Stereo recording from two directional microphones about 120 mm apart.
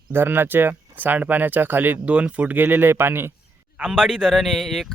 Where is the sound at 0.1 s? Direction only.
20° right (ahead or behind).